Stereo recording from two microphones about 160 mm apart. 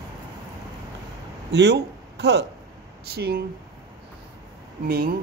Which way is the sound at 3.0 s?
75° right (ahead or behind).